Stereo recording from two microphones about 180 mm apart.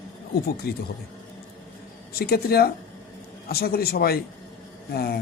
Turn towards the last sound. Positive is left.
turn(degrees=60)  # may be behind; listen again after turning